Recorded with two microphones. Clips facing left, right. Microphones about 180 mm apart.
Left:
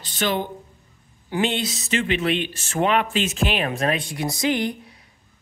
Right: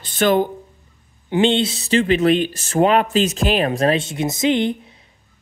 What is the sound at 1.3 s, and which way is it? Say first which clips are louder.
Speech: right 7 dB; 25° right (ahead or behind).